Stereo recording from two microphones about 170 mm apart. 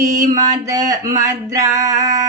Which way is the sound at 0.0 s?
20° right (ahead or behind).